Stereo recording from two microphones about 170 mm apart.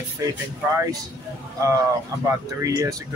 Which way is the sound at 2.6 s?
20° right (ahead or behind).